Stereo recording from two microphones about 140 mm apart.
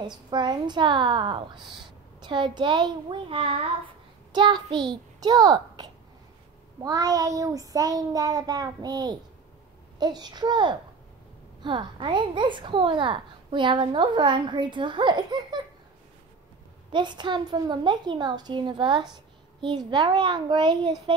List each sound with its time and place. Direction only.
0.0 s a woman's voice: 30° right (ahead or behind)
4.3 s a woman's voice: 30° right (ahead or behind)
6.8 s child singing: 25° right (ahead or behind)
9.9 s a woman's voice: 30° right (ahead or behind)
16.9 s a woman's voice: 30° right (ahead or behind)